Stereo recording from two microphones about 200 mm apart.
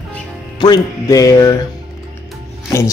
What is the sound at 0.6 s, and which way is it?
Music, 20° left (ahead or behind).